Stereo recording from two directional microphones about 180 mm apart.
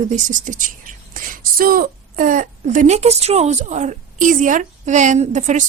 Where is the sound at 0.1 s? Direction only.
45° right (ahead or behind).